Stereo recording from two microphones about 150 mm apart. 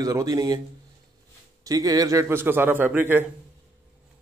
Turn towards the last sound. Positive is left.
turn(degrees=-15)  # may be behind; listen again after turning